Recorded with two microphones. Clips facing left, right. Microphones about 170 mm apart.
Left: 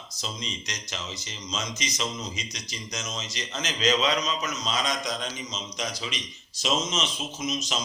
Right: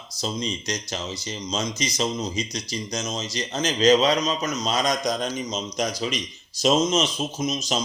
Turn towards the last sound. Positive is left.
turn(degrees=-35)  # may be behind; listen again after turning